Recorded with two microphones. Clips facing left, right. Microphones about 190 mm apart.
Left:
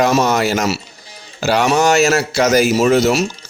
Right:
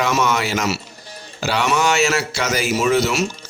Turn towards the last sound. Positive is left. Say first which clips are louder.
# left 5 dB
turn(degrees=45)  # may be behind; listen again after turning